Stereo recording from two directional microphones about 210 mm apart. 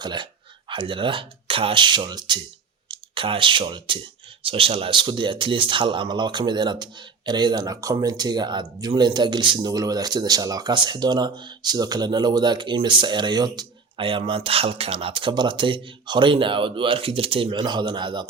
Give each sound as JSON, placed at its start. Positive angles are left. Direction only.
{"t": 0.0, "sound": "speech", "side_deg": -20}